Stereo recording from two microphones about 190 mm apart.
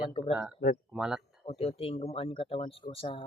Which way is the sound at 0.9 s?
5° right (ahead or behind).